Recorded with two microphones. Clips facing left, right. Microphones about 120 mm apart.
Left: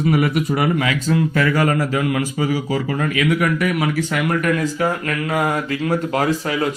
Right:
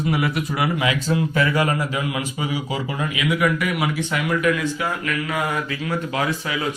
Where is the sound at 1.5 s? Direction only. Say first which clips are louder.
Left 3 dB; 45° left (ahead or behind).